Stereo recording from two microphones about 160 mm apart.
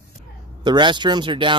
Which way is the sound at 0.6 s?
30° right (ahead or behind).